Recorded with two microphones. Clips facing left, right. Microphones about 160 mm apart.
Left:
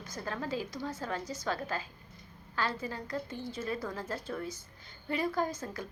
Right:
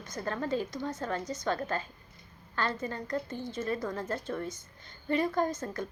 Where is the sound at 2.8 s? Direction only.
5° left (ahead or behind).